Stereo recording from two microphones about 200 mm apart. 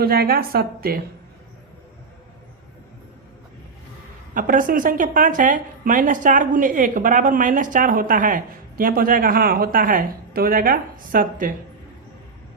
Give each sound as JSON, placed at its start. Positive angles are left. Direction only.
{"t": 0.0, "sound": "speech", "side_deg": -50}
{"t": 4.4, "sound": "speech", "side_deg": -45}